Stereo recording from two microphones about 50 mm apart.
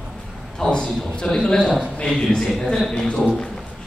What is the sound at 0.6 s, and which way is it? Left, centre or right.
A man's voice, centre.